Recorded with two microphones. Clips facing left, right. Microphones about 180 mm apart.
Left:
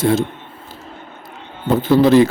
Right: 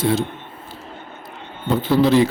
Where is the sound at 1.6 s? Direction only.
45° left (ahead or behind).